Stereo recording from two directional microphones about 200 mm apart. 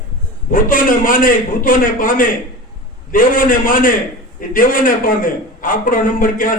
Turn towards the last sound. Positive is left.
turn(degrees=45)  # may be behind; listen again after turning